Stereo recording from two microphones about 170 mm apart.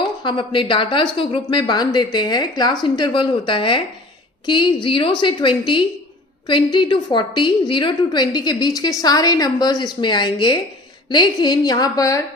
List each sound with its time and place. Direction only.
0.2 s a woman's voice: 30° left (ahead or behind)